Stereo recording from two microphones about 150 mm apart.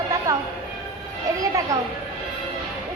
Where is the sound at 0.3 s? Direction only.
20° right (ahead or behind).